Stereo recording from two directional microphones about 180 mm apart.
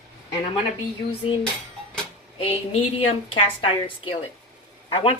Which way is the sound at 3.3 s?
30° left (ahead or behind).